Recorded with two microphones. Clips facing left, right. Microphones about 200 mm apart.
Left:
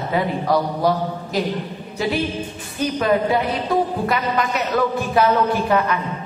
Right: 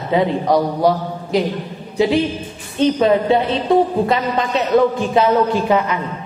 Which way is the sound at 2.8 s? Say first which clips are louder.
Right 5 dB; 25° right (ahead or behind).